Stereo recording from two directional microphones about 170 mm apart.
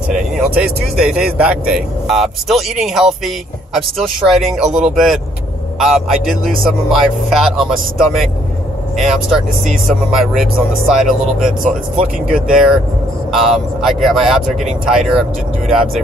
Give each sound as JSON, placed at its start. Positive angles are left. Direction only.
{"t": 0.6, "sound": "speech", "side_deg": -5}
{"t": 8.9, "sound": "speech", "side_deg": 0}
{"t": 12.3, "sound": "speech", "side_deg": -5}